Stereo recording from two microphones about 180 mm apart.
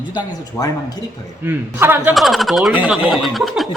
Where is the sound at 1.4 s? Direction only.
10° right (ahead or behind).